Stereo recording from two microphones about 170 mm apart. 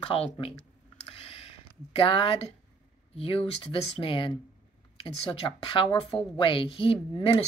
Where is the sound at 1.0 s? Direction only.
35° left (ahead or behind).